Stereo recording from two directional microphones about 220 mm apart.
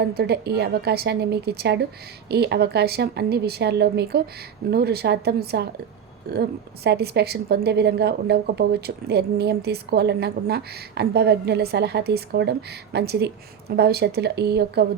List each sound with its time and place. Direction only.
0.0 s a woman's voice: 45° right (ahead or behind)